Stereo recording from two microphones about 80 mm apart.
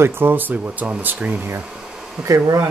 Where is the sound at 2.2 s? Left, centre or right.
Right.